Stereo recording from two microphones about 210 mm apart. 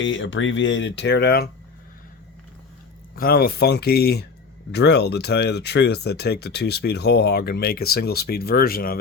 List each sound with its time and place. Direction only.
0.0 s speech: 65° left (ahead or behind)
3.2 s speech: 45° left (ahead or behind)